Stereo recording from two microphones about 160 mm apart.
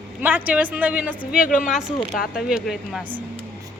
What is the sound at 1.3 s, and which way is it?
Speech, 55° left (ahead or behind).